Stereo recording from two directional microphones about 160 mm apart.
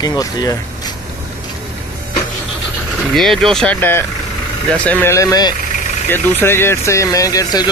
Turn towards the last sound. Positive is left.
turn(degrees=20)  # may be behind; listen again after turning